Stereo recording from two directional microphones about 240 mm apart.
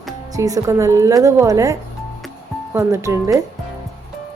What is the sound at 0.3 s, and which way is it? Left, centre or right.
A woman's voice, centre.